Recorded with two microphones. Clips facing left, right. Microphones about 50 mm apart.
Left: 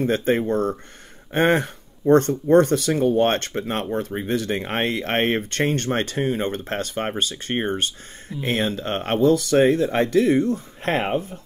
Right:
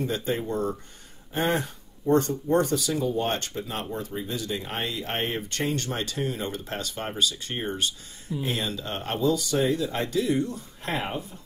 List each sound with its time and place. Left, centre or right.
0.0 s speech: left